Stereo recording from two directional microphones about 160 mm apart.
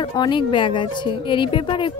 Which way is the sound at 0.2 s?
30° left (ahead or behind).